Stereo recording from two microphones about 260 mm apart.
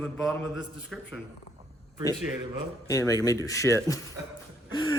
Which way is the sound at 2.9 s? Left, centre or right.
Centre.